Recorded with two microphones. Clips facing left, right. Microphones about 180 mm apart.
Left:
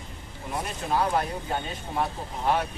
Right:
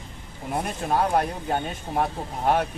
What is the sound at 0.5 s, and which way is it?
Speech, 50° right (ahead or behind).